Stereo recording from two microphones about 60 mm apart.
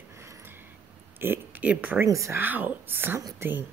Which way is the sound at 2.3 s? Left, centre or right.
Right.